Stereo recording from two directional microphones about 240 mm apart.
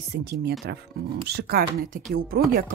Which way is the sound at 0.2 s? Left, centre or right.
Right.